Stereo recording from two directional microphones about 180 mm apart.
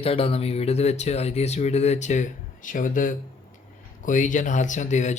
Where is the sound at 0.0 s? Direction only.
30° left (ahead or behind).